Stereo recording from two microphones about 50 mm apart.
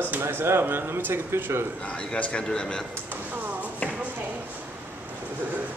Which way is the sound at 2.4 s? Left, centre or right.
Centre.